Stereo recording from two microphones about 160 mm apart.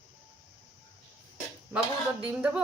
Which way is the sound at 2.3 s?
10° right (ahead or behind).